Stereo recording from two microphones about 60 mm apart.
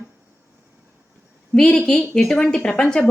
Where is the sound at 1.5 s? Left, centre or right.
Centre.